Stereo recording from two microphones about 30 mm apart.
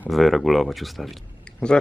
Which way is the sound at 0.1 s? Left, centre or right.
Centre.